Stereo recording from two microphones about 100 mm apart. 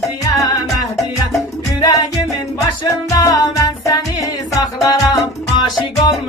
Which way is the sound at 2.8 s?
35° left (ahead or behind).